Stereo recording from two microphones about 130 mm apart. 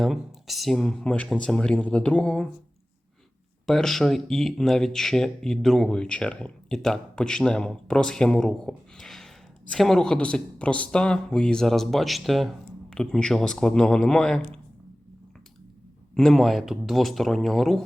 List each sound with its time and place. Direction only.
0.0 s speech: centre (ahead or behind)
3.7 s speech: 5° left (ahead or behind)
16.1 s speech: centre (ahead or behind)